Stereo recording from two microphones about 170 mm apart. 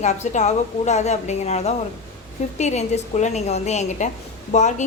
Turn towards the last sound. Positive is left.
turn(degrees=45)  # may be behind; listen again after turning